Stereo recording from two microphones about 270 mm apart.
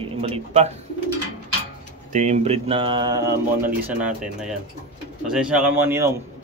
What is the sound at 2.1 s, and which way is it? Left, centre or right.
Speech, right.